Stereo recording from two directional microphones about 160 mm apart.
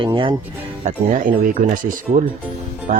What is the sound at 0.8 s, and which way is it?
Speech, 55° right (ahead or behind).